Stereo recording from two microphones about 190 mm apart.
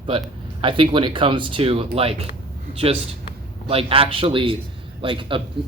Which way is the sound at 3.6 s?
30° right (ahead or behind).